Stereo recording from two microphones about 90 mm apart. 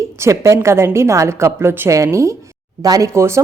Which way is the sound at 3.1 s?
30° right (ahead or behind).